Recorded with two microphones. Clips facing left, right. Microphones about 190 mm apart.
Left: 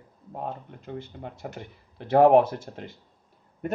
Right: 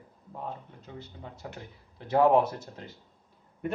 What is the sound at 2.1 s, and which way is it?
Speech, 60° left (ahead or behind).